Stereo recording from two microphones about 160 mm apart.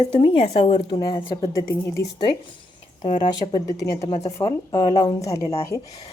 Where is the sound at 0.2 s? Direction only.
40° left (ahead or behind).